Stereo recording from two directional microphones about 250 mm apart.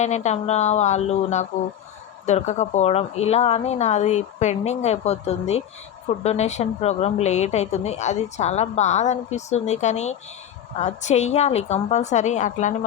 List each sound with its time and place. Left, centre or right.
0.0 s speech: left